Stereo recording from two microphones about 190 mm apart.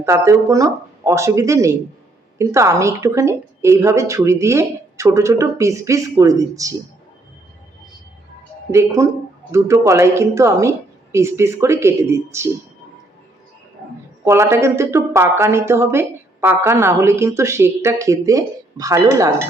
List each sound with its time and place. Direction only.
0.0 s speech: 15° right (ahead or behind)
8.7 s speech: 15° right (ahead or behind)
14.3 s speech: 15° right (ahead or behind)